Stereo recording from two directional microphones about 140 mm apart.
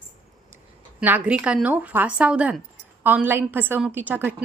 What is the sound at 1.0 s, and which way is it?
Speech, 10° right (ahead or behind).